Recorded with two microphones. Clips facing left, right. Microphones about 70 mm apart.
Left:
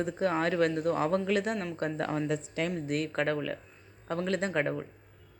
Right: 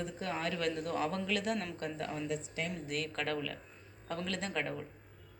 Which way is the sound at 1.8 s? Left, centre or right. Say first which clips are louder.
Left 7 dB; left.